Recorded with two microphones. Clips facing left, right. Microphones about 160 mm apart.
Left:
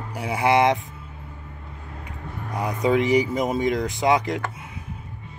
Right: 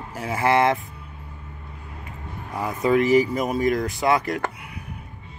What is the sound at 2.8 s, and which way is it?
Speech, 20° left (ahead or behind).